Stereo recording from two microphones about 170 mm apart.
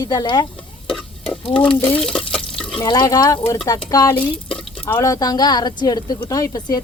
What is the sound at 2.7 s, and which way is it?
Speech, 25° left (ahead or behind).